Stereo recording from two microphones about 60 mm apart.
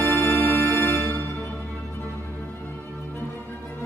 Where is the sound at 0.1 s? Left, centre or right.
Left.